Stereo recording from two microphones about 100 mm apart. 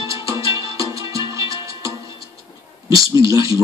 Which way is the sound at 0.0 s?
35° right (ahead or behind).